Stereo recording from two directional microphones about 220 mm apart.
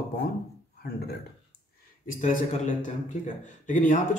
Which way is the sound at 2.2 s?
35° left (ahead or behind).